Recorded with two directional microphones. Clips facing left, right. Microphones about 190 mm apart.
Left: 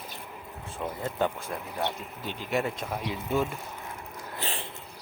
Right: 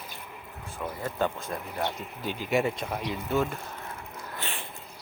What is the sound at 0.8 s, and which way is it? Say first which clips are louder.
Speech: even; 20° left (ahead or behind).